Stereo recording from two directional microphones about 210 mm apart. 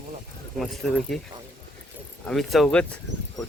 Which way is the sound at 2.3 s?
Centre (ahead or behind).